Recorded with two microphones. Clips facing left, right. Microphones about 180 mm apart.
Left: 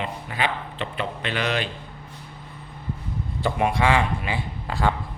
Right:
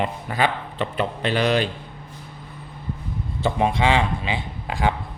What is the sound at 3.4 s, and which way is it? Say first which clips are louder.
A man's voice: right 2 dB; 25° right (ahead or behind).